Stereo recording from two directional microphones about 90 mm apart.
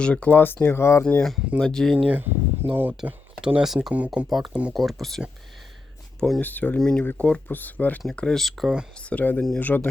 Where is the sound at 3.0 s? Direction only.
20° right (ahead or behind).